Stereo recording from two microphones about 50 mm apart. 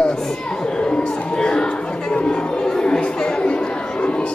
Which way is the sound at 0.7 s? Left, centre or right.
Centre.